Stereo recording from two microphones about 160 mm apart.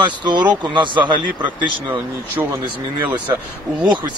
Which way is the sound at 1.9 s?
15° right (ahead or behind).